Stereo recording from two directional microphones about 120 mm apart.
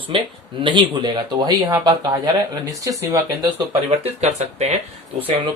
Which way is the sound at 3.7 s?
60° right (ahead or behind).